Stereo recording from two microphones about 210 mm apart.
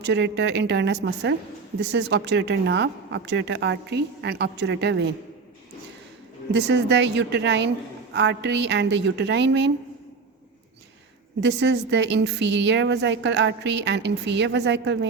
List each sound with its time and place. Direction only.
0.0 s a woman's voice: 55° right (ahead or behind)
6.5 s a woman's voice: 55° right (ahead or behind)
11.3 s a woman's voice: 55° right (ahead or behind)